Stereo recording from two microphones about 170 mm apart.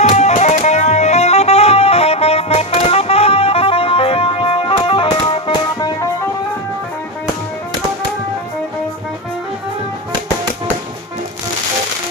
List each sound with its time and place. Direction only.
0.0 s music: 40° left (ahead or behind)